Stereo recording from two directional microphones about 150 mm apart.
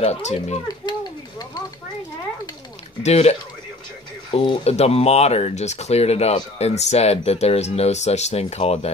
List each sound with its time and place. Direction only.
0.0 s speech: 50° left (ahead or behind)
3.0 s speech: 45° left (ahead or behind)
4.3 s speech: 35° left (ahead or behind)